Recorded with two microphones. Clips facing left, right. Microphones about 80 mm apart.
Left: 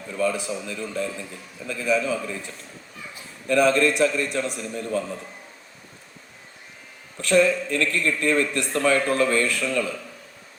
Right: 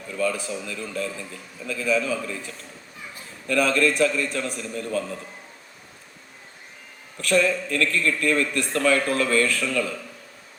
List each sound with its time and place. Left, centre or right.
0.1 s a man's voice: left
3.4 s a man's voice: left
7.2 s a man's voice: left